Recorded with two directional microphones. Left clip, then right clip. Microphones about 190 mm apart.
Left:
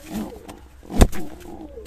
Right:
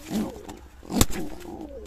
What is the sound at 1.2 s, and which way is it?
Bird, 5° left (ahead or behind).